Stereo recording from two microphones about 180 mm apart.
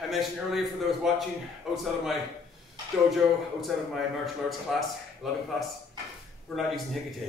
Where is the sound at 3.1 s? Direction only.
Centre (ahead or behind).